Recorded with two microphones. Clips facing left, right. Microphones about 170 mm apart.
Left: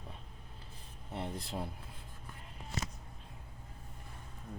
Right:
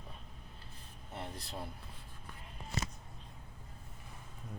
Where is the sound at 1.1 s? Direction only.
25° left (ahead or behind).